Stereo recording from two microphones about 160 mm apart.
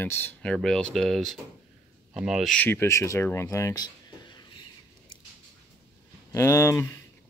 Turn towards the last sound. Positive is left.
turn(degrees=15)  # may be behind; listen again after turning